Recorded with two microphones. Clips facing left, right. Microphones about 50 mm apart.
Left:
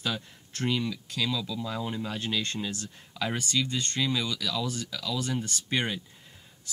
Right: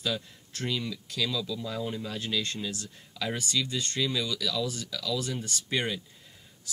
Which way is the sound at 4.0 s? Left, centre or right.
Centre.